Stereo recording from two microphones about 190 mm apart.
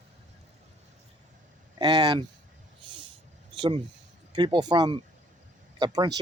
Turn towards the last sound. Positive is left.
turn(degrees=-20)  # may be behind; listen again after turning